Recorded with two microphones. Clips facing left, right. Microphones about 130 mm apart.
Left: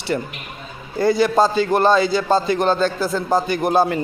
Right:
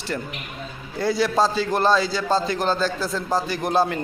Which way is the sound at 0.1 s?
5° left (ahead or behind).